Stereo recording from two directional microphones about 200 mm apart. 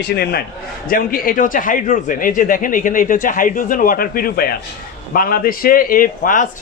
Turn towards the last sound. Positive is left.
turn(degrees=40)  # may be behind; listen again after turning